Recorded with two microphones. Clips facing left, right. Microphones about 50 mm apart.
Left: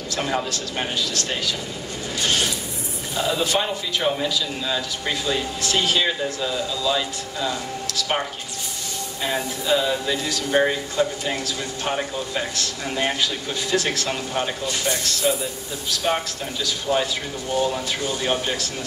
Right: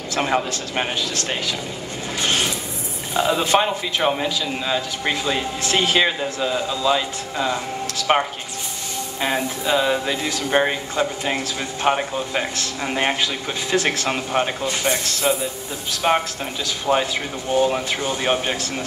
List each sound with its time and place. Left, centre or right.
0.1 s speech: right
2.1 s music: right
3.2 s speech: right
9.2 s speech: right
16.6 s speech: right